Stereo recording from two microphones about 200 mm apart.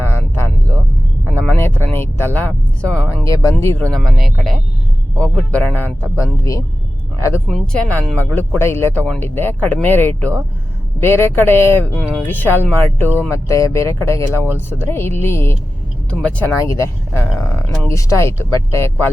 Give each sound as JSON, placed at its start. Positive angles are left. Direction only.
{"t": 0.0, "sound": "a sound", "side_deg": 10}
{"t": 3.2, "sound": "speech", "side_deg": 15}
{"t": 7.4, "sound": "speech", "side_deg": 5}